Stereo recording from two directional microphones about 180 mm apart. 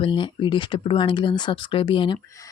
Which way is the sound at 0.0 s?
25° left (ahead or behind).